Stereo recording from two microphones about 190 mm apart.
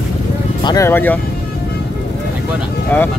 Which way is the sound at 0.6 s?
20° left (ahead or behind).